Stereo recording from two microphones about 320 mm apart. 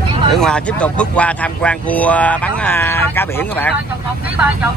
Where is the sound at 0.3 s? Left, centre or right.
Centre.